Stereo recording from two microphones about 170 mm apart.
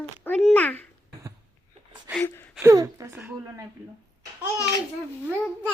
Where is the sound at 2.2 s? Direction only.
10° left (ahead or behind).